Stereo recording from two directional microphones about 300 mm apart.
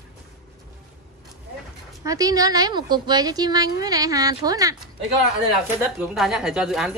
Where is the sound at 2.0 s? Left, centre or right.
Centre.